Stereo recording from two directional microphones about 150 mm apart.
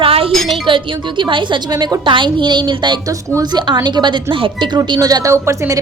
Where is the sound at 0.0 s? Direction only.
40° right (ahead or behind).